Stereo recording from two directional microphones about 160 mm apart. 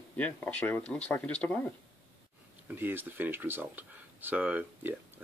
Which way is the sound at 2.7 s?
15° right (ahead or behind).